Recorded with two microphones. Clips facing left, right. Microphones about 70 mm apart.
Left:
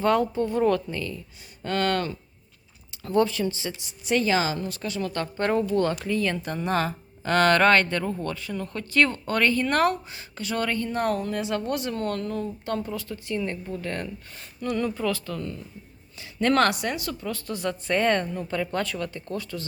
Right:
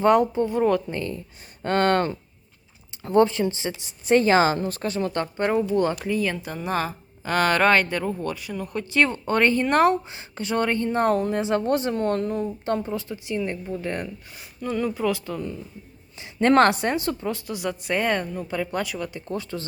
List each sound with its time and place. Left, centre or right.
0.0 s speech: right
0.4 s a woman's voice: centre
0.9 s speech: right
4.9 s a woman's voice: right
17.4 s a woman's voice: centre